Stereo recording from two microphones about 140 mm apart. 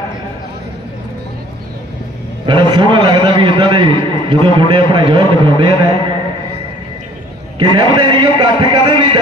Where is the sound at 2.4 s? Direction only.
35° right (ahead or behind).